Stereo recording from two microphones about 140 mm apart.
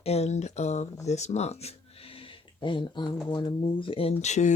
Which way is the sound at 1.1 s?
55° left (ahead or behind).